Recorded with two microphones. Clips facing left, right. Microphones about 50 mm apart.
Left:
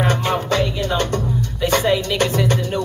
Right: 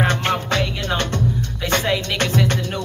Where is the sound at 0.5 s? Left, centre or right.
Right.